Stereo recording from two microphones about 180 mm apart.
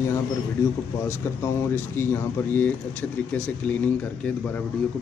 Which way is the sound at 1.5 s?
15° left (ahead or behind).